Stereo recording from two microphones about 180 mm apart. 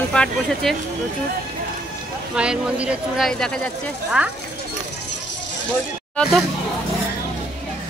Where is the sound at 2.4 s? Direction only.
5° right (ahead or behind).